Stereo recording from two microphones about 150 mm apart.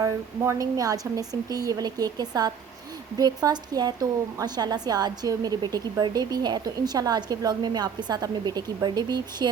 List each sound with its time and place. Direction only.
0.0 s a woman's voice: 20° right (ahead or behind)